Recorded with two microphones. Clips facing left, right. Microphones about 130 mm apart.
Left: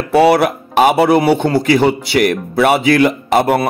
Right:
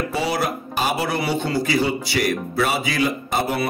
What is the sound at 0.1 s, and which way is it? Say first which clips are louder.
Speech: left 12 dB; 65° left (ahead or behind).